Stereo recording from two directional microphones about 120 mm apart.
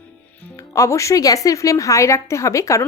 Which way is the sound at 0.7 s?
25° left (ahead or behind).